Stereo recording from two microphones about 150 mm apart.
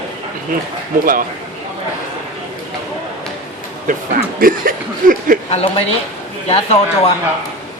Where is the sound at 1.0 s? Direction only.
70° right (ahead or behind).